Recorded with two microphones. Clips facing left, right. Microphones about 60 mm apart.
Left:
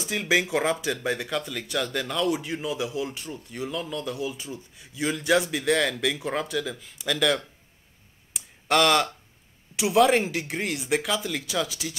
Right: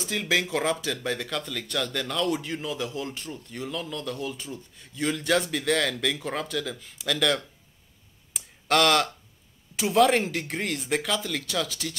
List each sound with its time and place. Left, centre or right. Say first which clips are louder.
0.1 s speech: left 2 dB; centre
8.3 s a sound: even; centre
9.8 s speech: left 1 dB; centre